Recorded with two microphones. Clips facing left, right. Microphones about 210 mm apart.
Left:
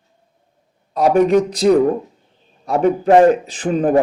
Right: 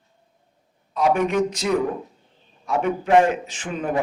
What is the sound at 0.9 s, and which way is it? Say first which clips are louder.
Speech: left 7 dB; 35° left (ahead or behind).